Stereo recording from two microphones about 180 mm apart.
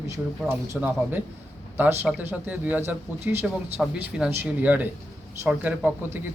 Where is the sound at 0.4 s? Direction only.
10° right (ahead or behind).